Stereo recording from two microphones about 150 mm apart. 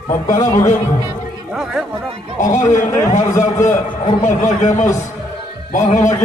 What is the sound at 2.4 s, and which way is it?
Speech, 55° left (ahead or behind).